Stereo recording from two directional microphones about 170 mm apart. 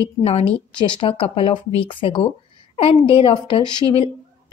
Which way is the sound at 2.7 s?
35° left (ahead or behind).